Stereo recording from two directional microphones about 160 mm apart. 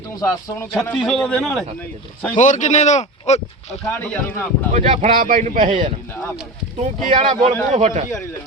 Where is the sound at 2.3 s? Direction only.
50° left (ahead or behind).